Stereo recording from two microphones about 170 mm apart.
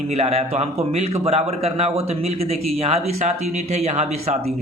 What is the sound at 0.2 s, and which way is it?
A man's voice, 40° right (ahead or behind).